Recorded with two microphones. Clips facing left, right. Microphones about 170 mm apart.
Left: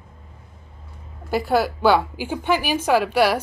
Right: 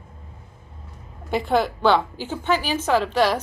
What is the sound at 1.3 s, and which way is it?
Speech, 5° left (ahead or behind).